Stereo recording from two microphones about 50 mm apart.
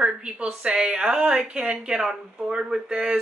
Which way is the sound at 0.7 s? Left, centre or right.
Centre.